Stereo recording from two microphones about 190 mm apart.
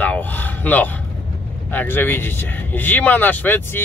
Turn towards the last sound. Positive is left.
turn(degrees=10)  # may be behind; listen again after turning